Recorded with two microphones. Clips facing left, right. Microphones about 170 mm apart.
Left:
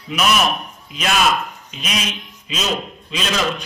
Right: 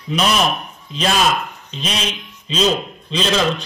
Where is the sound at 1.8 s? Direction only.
30° right (ahead or behind).